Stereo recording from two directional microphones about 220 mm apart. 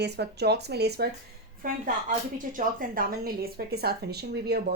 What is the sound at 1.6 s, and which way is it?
A woman's voice, 35° right (ahead or behind).